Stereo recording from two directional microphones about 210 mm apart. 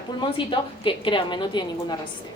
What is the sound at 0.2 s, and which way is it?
A woman's voice, 25° left (ahead or behind).